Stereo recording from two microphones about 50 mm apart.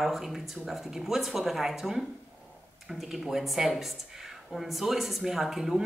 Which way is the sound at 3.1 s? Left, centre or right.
Centre.